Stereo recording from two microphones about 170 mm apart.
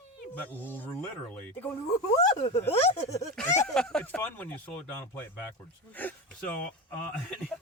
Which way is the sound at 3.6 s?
5° left (ahead or behind).